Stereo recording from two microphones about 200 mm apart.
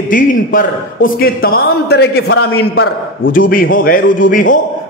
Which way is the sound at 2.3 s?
90° left.